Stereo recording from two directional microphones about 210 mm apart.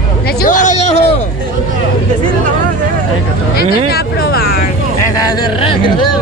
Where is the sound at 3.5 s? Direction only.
45° left (ahead or behind).